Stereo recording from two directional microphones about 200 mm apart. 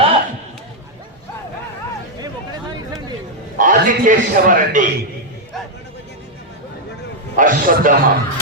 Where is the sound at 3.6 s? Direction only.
40° right (ahead or behind).